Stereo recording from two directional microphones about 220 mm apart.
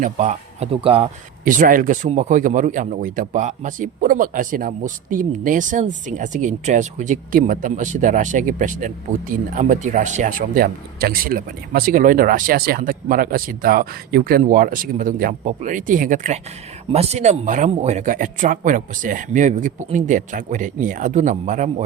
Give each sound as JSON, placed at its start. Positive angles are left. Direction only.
{"t": 0.0, "sound": "a man's voice", "side_deg": -30}